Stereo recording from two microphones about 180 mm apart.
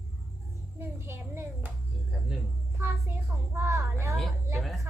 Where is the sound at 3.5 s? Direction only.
15° right (ahead or behind).